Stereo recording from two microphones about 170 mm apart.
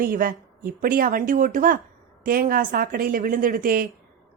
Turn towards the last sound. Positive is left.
turn(degrees=-55)  # may be behind; listen again after turning